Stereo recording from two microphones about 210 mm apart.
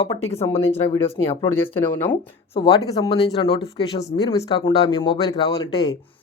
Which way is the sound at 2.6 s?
25° left (ahead or behind).